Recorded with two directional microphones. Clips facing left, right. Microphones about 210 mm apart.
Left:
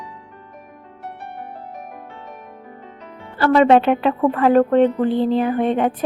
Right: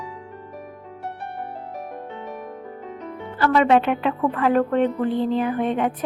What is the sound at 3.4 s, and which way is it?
A woman's voice, 30° left (ahead or behind).